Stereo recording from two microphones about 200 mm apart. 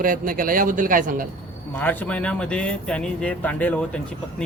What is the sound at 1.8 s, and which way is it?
Speech, 10° left (ahead or behind).